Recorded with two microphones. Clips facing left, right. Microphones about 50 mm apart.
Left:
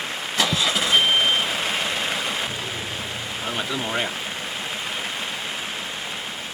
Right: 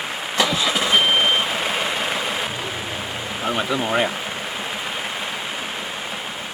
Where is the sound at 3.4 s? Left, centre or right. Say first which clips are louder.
Right 6 dB; centre.